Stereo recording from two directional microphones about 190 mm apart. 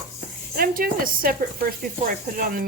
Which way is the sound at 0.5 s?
50° right (ahead or behind).